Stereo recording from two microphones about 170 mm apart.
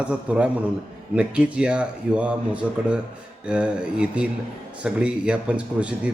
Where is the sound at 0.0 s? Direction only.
5° right (ahead or behind).